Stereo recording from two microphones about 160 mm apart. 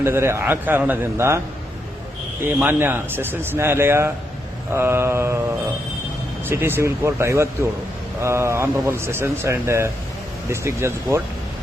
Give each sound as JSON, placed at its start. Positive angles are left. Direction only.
{"t": 0.0, "sound": "speech", "side_deg": -15}
{"t": 2.5, "sound": "speech", "side_deg": -10}
{"t": 6.5, "sound": "speech", "side_deg": -15}